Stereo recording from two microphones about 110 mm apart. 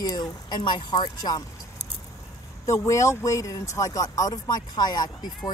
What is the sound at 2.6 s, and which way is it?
Speech, 25° left (ahead or behind).